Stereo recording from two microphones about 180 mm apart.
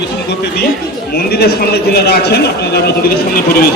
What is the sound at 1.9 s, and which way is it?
Speech, 65° left (ahead or behind).